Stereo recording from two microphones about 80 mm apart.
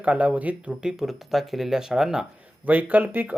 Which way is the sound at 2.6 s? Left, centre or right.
Right.